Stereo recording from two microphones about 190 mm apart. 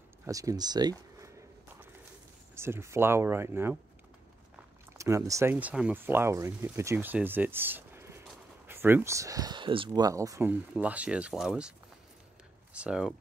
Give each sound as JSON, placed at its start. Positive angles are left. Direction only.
{"t": 0.2, "sound": "speech", "side_deg": -15}
{"t": 2.5, "sound": "speech", "side_deg": -15}
{"t": 4.9, "sound": "speech", "side_deg": -15}
{"t": 12.7, "sound": "speech", "side_deg": -5}